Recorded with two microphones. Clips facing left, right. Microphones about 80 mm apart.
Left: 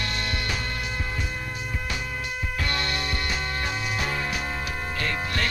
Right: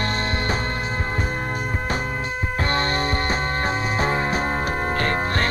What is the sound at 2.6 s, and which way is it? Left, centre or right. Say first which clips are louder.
Music: right 7 dB; right.